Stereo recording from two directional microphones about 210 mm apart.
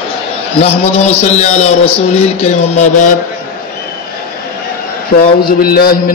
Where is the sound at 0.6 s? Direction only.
30° left (ahead or behind).